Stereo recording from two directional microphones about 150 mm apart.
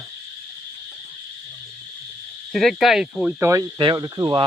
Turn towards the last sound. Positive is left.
turn(degrees=-30)  # may be behind; listen again after turning